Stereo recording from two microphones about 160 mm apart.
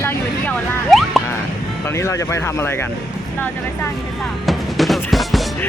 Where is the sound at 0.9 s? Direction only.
Centre (ahead or behind).